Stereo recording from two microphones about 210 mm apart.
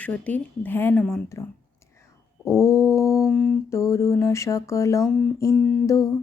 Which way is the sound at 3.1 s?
Centre (ahead or behind).